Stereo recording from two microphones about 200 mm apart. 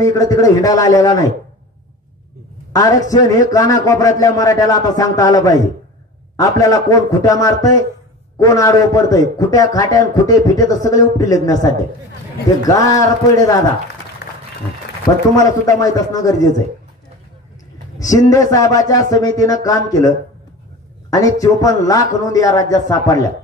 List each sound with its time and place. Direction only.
0.0 s a man's voice: 15° left (ahead or behind)
2.7 s a man's voice: 20° left (ahead or behind)
15.3 s a man's voice: 15° left (ahead or behind)
17.9 s a man's voice: 15° left (ahead or behind)